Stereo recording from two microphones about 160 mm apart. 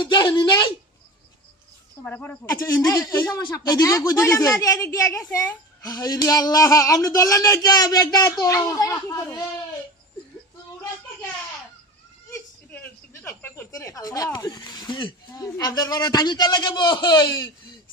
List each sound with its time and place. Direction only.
0.0 s a woman's voice: 30° left (ahead or behind)
2.0 s a woman's voice: 10° left (ahead or behind)
12.3 s a sound: 15° left (ahead or behind)
14.3 s a woman's voice: 25° left (ahead or behind)